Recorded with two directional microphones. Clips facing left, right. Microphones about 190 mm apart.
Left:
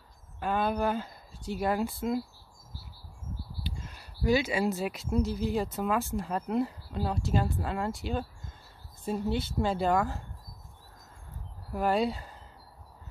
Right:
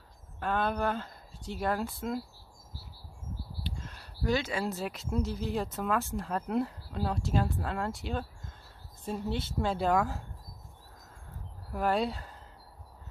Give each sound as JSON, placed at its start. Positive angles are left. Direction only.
{"t": 0.4, "sound": "speech", "side_deg": 5}
{"t": 3.6, "sound": "speech", "side_deg": 5}
{"t": 11.7, "sound": "speech", "side_deg": 0}